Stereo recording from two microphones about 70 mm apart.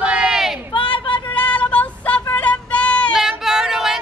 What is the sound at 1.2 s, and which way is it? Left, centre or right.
Child singing, left.